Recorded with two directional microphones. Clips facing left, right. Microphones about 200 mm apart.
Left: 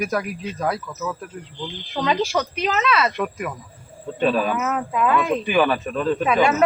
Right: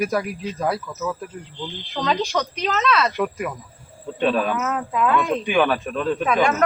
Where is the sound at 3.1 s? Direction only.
Centre (ahead or behind).